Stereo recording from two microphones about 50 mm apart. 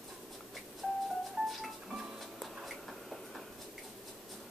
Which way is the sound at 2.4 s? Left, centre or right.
Centre.